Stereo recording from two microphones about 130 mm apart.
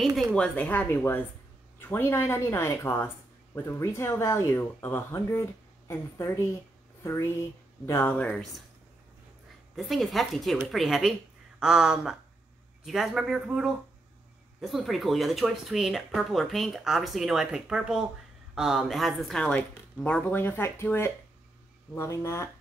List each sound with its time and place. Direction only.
0.0 s speech: centre (ahead or behind); by 8.1 s 20° left (ahead or behind)
8.1 s speech: 10° left (ahead or behind)
9.8 s speech: centre (ahead or behind); by 22.5 s 20° left (ahead or behind)